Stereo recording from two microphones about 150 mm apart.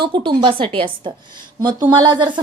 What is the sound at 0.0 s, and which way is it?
A woman's voice, 30° right (ahead or behind).